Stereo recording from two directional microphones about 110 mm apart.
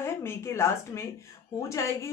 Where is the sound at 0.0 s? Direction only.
20° left (ahead or behind).